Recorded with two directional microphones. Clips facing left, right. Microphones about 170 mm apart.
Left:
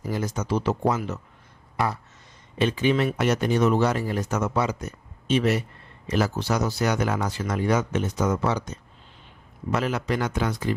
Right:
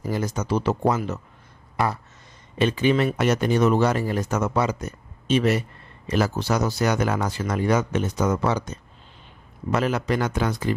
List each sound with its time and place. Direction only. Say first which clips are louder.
0.1 s speech: right 2 dB; 45° right (ahead or behind)
9.7 s speech: right 2 dB; 45° right (ahead or behind)